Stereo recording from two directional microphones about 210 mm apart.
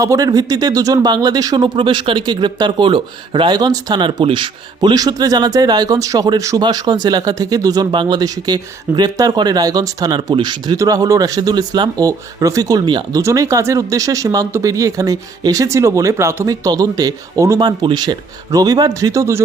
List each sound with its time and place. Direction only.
0.0 s speech: 15° right (ahead or behind)